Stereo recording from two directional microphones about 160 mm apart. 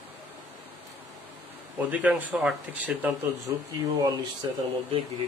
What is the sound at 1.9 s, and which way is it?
Speech, 10° right (ahead or behind).